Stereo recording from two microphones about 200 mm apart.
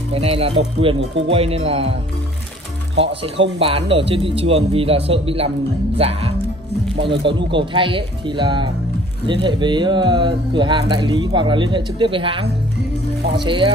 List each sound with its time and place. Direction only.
0.1 s speech: 30° right (ahead or behind)
3.5 s speech: 30° right (ahead or behind)